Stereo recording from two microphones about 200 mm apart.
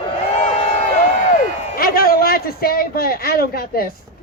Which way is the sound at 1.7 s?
50° left (ahead or behind).